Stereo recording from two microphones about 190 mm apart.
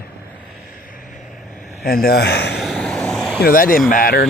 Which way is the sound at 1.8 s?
55° left (ahead or behind).